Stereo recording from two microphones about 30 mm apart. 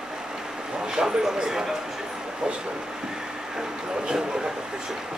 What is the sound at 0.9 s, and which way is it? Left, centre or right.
Speech, right.